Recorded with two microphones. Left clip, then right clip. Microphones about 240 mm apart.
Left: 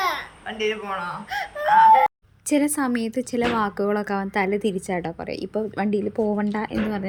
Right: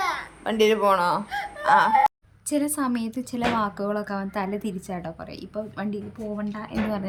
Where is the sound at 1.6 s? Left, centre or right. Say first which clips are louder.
Left 3 dB; right.